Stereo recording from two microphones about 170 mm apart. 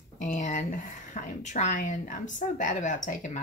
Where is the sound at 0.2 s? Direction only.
45° left (ahead or behind).